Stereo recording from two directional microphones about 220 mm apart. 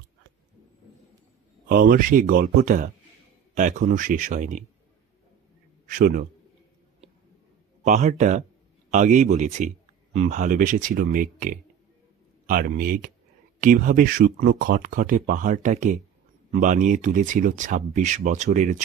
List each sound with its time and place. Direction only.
1.7 s speech: 40° right (ahead or behind)
5.9 s a man's voice: 40° right (ahead or behind)
7.8 s speech: 35° right (ahead or behind)